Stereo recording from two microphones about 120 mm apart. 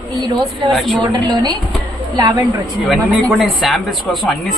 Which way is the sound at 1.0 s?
35° right (ahead or behind).